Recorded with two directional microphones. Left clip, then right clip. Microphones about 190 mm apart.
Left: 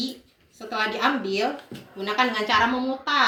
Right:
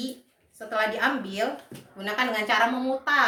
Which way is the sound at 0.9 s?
15° right (ahead or behind).